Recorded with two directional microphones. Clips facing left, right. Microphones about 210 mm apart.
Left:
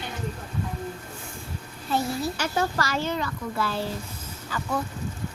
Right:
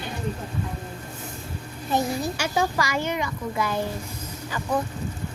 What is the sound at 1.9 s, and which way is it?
A woman's voice, 15° right (ahead or behind).